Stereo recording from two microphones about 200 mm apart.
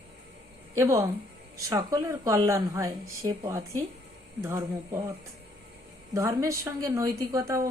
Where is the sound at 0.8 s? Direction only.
15° right (ahead or behind).